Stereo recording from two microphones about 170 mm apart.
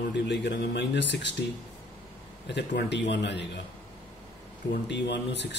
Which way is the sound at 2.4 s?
90° left.